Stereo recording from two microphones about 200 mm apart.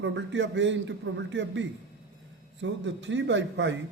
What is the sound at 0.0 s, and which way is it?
A man's voice, 65° right (ahead or behind).